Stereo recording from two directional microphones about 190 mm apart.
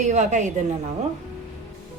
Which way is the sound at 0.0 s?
40° right (ahead or behind).